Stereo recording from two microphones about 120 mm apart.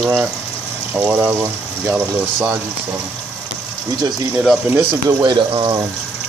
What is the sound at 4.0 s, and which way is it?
Speech, 35° right (ahead or behind).